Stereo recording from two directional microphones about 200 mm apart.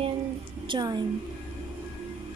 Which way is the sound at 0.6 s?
20° right (ahead or behind).